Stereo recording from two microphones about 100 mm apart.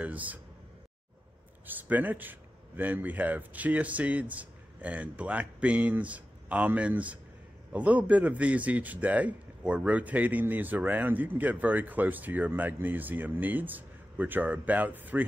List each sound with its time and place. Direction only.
0.0 s a man's voice: 15° right (ahead or behind)
1.7 s a man's voice: 15° right (ahead or behind)